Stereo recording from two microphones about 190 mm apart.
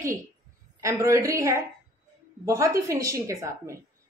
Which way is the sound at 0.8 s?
15° right (ahead or behind).